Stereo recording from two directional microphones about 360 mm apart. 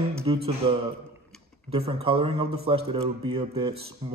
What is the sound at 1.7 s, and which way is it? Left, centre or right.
A man's voice, centre.